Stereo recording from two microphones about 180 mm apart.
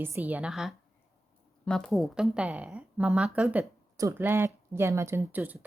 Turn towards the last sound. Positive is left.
turn(degrees=-10)  # may be behind; listen again after turning